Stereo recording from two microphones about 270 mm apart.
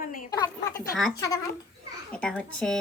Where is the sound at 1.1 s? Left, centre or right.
Centre.